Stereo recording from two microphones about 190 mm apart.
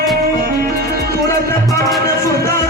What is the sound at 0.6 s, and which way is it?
Music, 60° right (ahead or behind).